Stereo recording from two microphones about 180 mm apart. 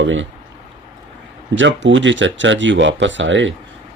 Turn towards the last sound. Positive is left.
turn(degrees=-90)